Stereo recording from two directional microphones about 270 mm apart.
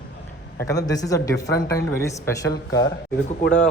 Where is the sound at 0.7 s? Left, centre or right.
Centre.